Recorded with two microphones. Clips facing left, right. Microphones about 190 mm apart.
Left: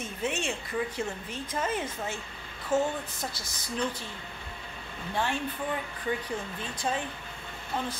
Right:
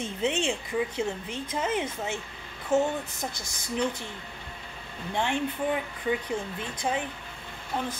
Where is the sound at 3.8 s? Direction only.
20° right (ahead or behind).